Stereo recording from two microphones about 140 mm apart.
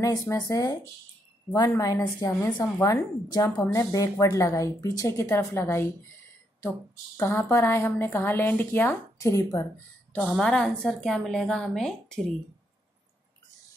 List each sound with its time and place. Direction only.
0.0 s speech: 25° left (ahead or behind)
7.2 s speech: 20° left (ahead or behind)
10.1 s a woman's voice: centre (ahead or behind)